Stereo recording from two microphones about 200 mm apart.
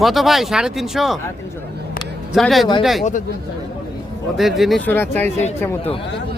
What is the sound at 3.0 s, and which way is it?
Speech, 40° left (ahead or behind).